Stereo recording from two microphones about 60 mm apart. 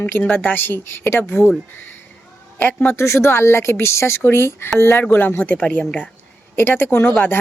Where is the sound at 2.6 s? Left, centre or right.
Left.